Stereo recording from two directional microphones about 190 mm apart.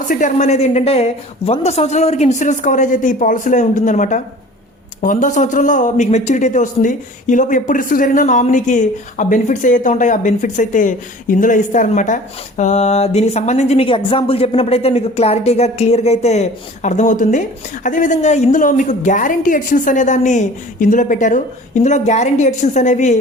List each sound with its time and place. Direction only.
0.1 s a man's voice: 45° left (ahead or behind)